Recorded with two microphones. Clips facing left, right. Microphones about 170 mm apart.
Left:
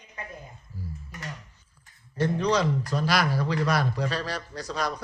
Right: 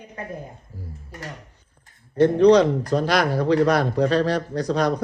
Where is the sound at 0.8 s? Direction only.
30° right (ahead or behind).